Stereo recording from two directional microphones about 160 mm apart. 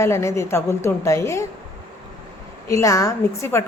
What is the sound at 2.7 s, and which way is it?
Speech, 20° left (ahead or behind).